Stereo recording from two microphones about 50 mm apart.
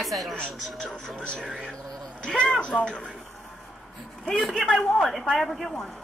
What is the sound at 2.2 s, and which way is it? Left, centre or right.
Speech, centre.